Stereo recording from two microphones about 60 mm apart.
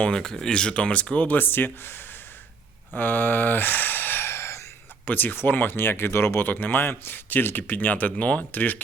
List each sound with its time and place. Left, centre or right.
0.0 s speech: centre; by 4.3 s left
4.3 s a sound: left
5.0 s speech: left
6.5 s speech: left